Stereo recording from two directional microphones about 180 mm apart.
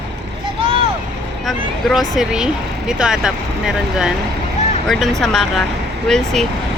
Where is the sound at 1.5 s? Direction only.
Centre (ahead or behind).